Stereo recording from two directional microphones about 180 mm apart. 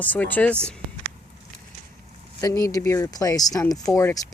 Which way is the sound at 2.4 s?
15° left (ahead or behind).